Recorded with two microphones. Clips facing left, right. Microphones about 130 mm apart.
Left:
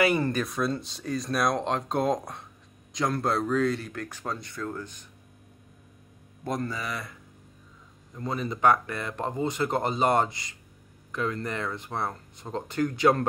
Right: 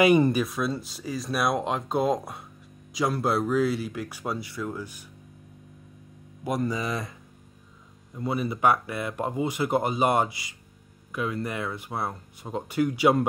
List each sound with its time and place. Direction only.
0.0 s speech: 15° right (ahead or behind)
6.4 s speech: 10° right (ahead or behind)
8.1 s speech: 10° right (ahead or behind)